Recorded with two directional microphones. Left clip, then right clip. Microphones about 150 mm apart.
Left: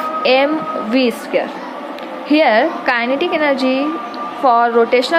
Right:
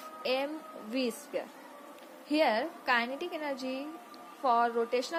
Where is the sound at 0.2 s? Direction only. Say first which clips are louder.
Left 19 dB; 20° right (ahead or behind).